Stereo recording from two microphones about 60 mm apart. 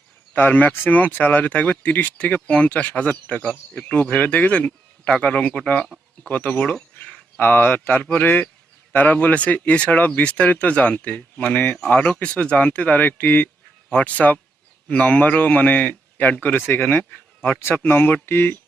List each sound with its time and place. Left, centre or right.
0.3 s speech: left